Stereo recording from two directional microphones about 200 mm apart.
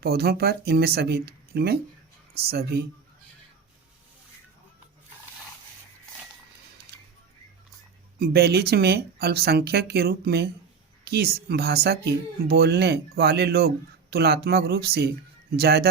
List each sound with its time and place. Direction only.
0.0 s speech: 50° right (ahead or behind)
8.2 s speech: 50° right (ahead or behind)